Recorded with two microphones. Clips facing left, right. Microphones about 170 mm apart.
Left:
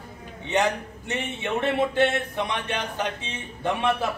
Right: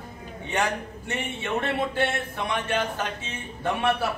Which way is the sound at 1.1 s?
20° left (ahead or behind).